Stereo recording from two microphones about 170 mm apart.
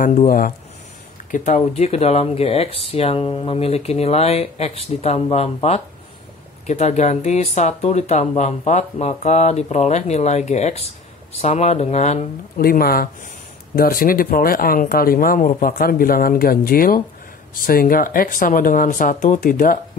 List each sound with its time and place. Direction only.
1.3 s speech: 45° left (ahead or behind)
12.5 s speech: 60° left (ahead or behind)